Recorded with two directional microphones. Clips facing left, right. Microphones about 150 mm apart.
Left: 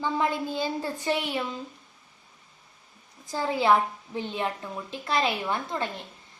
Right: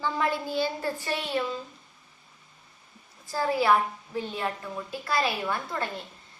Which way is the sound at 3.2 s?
20° left (ahead or behind).